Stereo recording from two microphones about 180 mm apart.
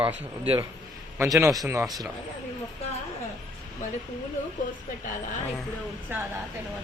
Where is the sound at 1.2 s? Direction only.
15° right (ahead or behind).